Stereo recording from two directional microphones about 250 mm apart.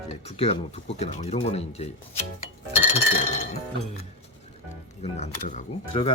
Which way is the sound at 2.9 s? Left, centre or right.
Left.